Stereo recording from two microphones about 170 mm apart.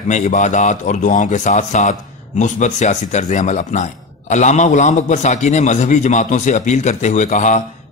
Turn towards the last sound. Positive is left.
turn(degrees=45)  # may be behind; listen again after turning